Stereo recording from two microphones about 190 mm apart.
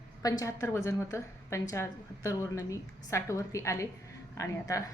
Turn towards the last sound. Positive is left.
turn(degrees=15)  # may be behind; listen again after turning